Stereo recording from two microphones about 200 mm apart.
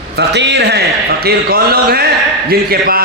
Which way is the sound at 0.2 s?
60° right (ahead or behind).